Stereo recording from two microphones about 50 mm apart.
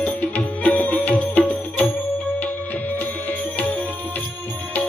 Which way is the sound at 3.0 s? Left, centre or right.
Left.